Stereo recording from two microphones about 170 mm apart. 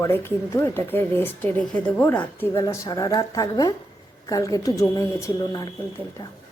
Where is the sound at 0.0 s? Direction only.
15° left (ahead or behind).